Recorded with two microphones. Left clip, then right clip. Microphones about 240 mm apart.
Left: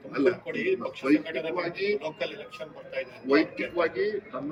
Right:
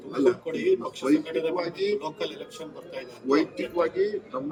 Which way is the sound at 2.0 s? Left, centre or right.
Right.